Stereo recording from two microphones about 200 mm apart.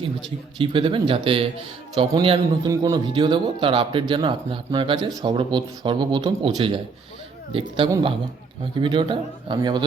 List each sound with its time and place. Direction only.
0.6 s speech: 25° right (ahead or behind)